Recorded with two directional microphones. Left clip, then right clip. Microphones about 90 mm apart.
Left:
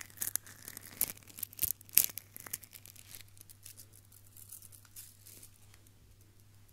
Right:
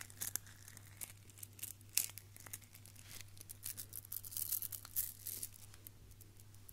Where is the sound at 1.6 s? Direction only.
25° left (ahead or behind).